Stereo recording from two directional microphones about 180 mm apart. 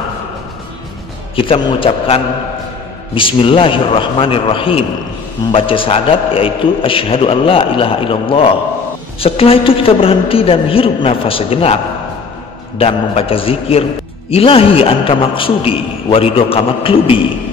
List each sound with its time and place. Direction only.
1.3 s a man's voice: 30° left (ahead or behind)